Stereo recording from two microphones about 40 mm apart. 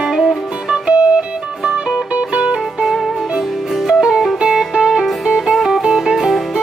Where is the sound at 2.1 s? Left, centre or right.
Right.